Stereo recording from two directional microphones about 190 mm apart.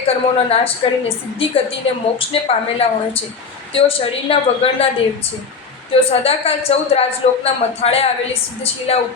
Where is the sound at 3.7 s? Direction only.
30° left (ahead or behind).